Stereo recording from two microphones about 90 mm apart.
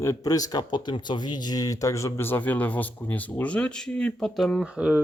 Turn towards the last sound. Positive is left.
turn(degrees=-10)  # may be behind; listen again after turning